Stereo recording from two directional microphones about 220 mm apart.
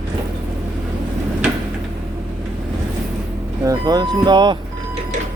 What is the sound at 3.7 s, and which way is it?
Speech, 20° right (ahead or behind).